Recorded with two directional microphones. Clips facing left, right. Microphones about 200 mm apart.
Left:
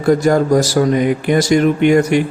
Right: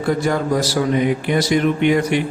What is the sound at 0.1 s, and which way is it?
Speech, 45° left (ahead or behind).